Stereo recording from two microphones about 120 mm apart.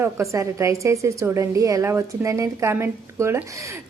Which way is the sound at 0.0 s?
25° right (ahead or behind).